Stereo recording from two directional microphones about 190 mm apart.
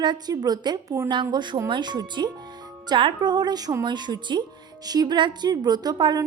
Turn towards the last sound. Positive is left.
turn(degrees=-20)  # may be behind; listen again after turning